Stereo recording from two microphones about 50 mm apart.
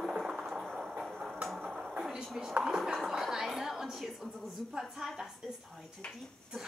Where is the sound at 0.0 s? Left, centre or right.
Centre.